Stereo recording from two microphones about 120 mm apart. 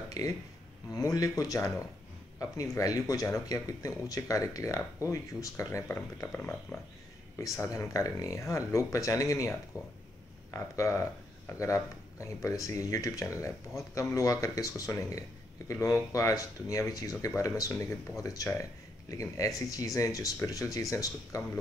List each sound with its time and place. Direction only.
0.1 s speech: 30° left (ahead or behind)